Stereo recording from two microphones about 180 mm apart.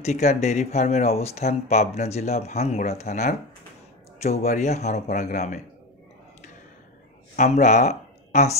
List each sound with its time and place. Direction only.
0.0 s speech: 40° left (ahead or behind)
7.3 s speech: 40° left (ahead or behind)